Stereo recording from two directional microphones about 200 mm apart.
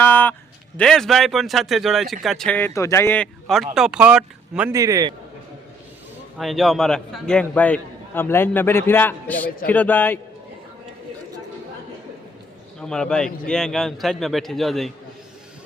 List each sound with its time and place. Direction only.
0.0 s a sound: 10° left (ahead or behind)
0.8 s a man's voice: 5° left (ahead or behind)
4.7 s a man's voice: 15° right (ahead or behind)
6.3 s a man's voice: centre (ahead or behind)
12.8 s a man's voice: 5° left (ahead or behind)